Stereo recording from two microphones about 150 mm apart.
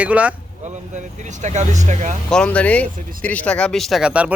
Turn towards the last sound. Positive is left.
turn(degrees=-5)  # may be behind; listen again after turning